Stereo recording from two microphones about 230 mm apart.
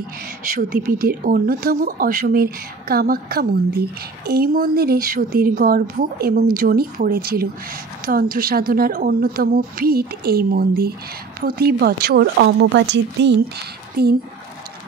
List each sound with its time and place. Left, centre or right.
0.8 s speech: right